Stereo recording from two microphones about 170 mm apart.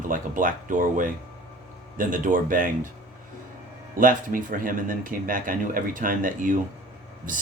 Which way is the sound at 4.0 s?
55° right (ahead or behind).